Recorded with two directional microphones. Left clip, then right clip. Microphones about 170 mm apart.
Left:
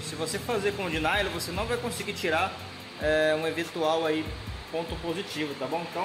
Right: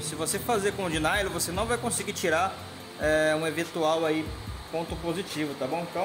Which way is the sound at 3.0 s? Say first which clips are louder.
Even; 55° right (ahead or behind).